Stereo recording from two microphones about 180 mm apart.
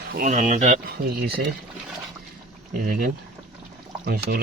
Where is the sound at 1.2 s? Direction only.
65° right (ahead or behind).